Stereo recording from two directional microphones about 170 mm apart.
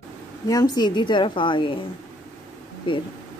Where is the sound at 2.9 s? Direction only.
30° left (ahead or behind).